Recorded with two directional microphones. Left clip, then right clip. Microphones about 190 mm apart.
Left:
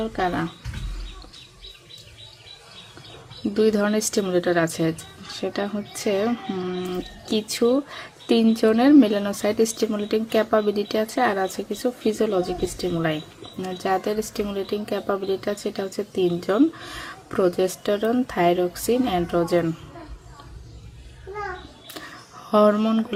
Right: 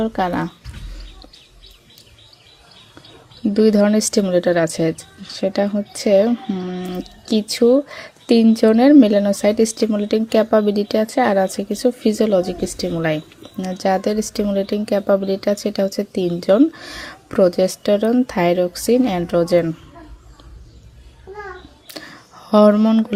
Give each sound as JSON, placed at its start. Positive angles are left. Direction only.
{"t": 0.0, "sound": "speech", "side_deg": -35}
{"t": 3.5, "sound": "speech", "side_deg": -30}
{"t": 22.5, "sound": "speech", "side_deg": -30}